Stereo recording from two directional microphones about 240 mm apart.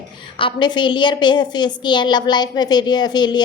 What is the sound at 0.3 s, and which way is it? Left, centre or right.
A woman's voice, centre.